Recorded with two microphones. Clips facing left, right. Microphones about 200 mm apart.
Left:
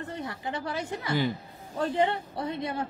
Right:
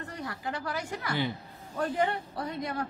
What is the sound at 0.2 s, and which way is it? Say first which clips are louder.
A woman's voice: right 1 dB; 25° left (ahead or behind).